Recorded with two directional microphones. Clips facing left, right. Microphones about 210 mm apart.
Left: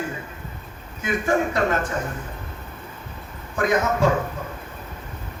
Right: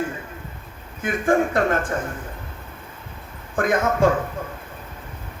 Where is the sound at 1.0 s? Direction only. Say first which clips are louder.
Right 2 dB; 50° right (ahead or behind).